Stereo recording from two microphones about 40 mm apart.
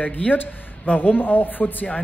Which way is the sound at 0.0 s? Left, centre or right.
Left.